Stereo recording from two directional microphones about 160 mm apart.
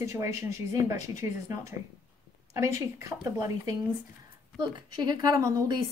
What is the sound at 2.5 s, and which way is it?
A woman's voice, 20° right (ahead or behind).